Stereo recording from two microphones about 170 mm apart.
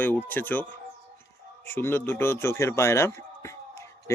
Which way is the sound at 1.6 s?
15° left (ahead or behind).